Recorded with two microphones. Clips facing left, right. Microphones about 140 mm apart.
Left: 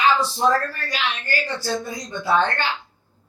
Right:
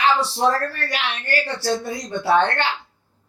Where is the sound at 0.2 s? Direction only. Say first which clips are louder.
Even; 70° right (ahead or behind).